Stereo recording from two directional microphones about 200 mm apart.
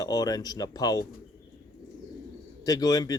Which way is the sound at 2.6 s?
20° left (ahead or behind).